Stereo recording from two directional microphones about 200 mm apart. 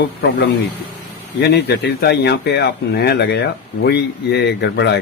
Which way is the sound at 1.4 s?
55° left (ahead or behind).